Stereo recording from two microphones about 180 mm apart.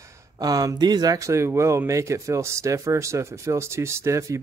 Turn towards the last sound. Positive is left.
turn(degrees=-15)  # may be behind; listen again after turning